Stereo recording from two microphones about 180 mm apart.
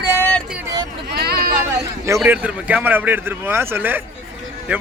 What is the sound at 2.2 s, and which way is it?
A man's voice, 10° right (ahead or behind).